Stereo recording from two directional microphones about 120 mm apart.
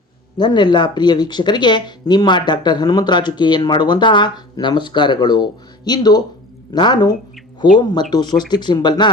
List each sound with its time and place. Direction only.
0.3 s speech: 40° left (ahead or behind)